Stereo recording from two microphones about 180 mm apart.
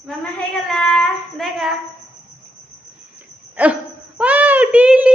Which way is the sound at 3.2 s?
10° right (ahead or behind).